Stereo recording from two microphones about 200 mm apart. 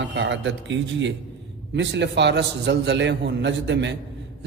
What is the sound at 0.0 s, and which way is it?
A man's voice, 65° right (ahead or behind).